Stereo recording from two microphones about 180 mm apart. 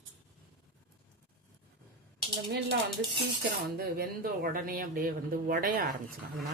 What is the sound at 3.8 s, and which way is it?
Speech, 60° right (ahead or behind).